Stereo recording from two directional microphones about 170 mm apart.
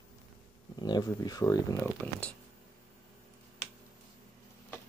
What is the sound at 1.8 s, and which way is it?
Speech, 10° left (ahead or behind).